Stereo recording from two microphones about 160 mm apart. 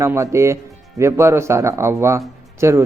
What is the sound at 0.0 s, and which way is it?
Speech, 15° right (ahead or behind).